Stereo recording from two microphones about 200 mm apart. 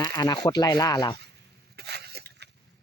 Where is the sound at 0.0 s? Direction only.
20° left (ahead or behind).